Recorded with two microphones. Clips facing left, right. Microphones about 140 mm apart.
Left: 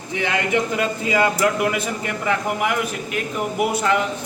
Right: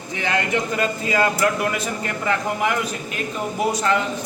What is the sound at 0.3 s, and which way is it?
A man's voice, 15° left (ahead or behind).